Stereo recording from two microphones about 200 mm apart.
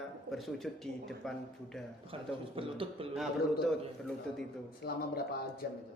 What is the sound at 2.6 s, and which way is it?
Chuckle, 25° right (ahead or behind).